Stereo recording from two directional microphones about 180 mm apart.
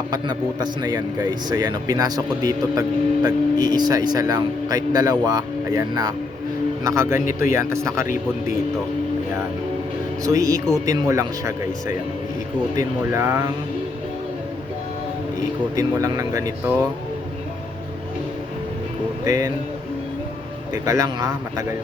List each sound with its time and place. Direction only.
0.1 s speech: 20° right (ahead or behind)
10.2 s speech: 20° right (ahead or behind)
15.7 s speech: 20° right (ahead or behind)
19.2 s speech: 20° right (ahead or behind)
20.8 s speech: 20° right (ahead or behind)